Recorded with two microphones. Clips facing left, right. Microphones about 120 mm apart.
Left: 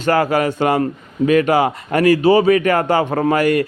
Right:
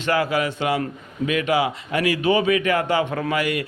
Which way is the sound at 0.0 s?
45° left (ahead or behind).